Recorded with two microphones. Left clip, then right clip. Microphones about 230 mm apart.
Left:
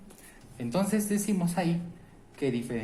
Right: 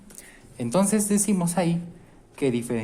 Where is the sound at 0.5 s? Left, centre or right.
Right.